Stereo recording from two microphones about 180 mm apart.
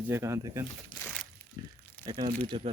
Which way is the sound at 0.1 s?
15° right (ahead or behind).